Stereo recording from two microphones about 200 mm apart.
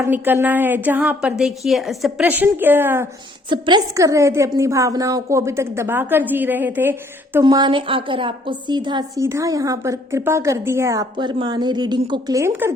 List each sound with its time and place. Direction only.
0.0 s a woman's voice: 10° right (ahead or behind)
7.4 s a woman's voice: 20° right (ahead or behind)